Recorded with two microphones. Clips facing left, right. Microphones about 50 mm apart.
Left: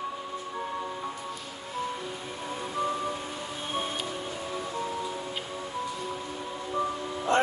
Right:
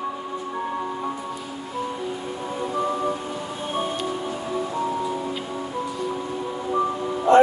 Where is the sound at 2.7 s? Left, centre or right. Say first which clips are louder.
Right 5 dB; right.